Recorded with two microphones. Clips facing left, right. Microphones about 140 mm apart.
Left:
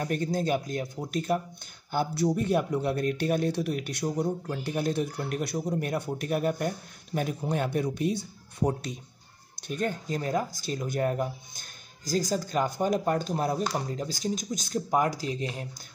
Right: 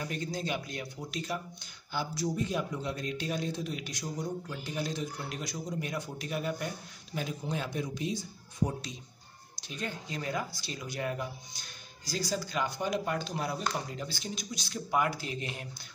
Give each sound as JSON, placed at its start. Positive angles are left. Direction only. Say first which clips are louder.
{"t": 0.0, "sound": "a man's voice", "louder": "left 7 dB", "side_deg": 50}